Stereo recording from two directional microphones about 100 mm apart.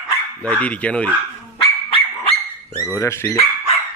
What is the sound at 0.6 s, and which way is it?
Speech, 15° left (ahead or behind).